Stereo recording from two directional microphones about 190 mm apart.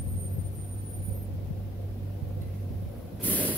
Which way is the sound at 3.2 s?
10° left (ahead or behind).